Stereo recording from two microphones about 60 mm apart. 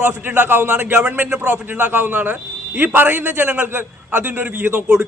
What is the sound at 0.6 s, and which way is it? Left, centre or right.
A man's voice, right.